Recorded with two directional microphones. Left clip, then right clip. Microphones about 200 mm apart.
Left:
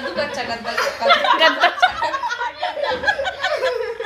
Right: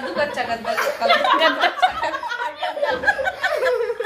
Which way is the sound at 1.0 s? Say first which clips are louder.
Left 2 dB; centre (ahead or behind).